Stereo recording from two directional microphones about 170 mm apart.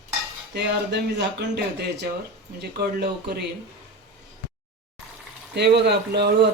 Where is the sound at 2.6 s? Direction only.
70° right (ahead or behind).